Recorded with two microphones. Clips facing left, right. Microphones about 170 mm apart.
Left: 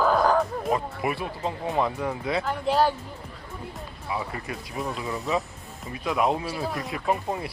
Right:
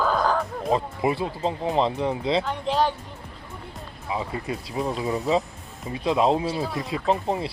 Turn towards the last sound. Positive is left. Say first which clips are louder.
# right 3 dB
turn(degrees=-25)  # may be behind; listen again after turning